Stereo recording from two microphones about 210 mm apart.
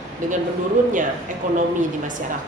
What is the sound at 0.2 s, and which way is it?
Speech, 35° right (ahead or behind).